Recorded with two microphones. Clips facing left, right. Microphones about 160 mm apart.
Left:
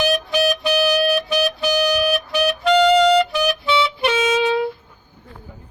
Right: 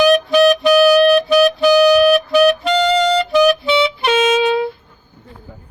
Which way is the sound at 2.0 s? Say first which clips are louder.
Right 8 dB; 55° right (ahead or behind).